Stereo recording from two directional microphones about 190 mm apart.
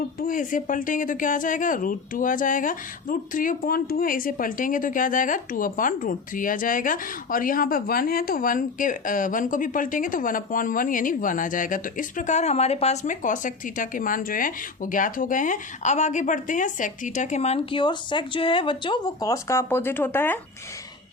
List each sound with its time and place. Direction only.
0.2 s speech: 45° left (ahead or behind); by 20.4 s 10° left (ahead or behind)